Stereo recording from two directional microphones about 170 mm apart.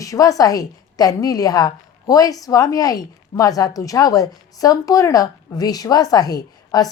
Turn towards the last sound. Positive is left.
turn(degrees=20)  # may be behind; listen again after turning